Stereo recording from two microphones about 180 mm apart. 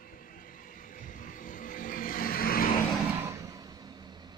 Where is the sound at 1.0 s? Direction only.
50° left (ahead or behind).